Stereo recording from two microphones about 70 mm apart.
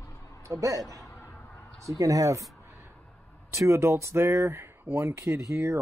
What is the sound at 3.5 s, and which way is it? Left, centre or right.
Speech, right.